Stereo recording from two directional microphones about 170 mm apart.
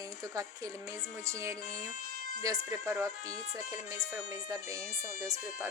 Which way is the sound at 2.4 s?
20° right (ahead or behind).